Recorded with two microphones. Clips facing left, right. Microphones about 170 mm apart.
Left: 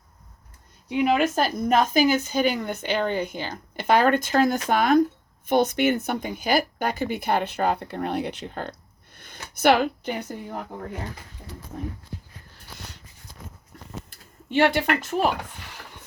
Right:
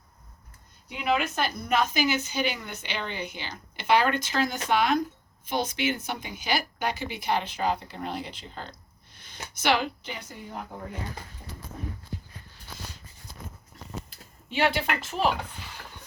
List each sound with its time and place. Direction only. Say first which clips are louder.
1.0 s speech: left 5 dB; 45° left (ahead or behind)
14.1 s speech: left 10 dB; 50° left (ahead or behind)